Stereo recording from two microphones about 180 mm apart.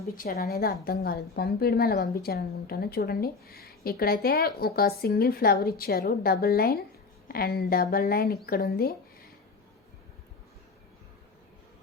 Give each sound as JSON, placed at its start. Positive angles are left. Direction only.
{"t": 0.2, "sound": "a woman's voice", "side_deg": 60}